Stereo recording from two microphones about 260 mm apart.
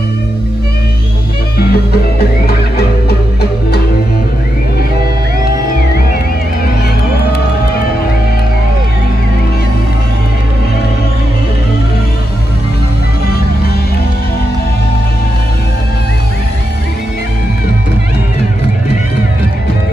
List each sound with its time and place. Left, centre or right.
1.6 s music: left